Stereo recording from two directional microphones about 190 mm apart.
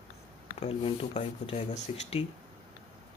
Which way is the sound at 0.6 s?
30° left (ahead or behind).